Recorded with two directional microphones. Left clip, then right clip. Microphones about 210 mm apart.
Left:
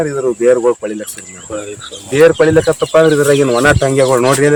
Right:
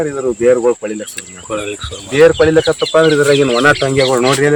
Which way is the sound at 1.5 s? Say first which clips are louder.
Right 3 dB; 60° right (ahead or behind).